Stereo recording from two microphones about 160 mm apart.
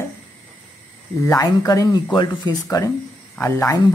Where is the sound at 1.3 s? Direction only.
20° left (ahead or behind).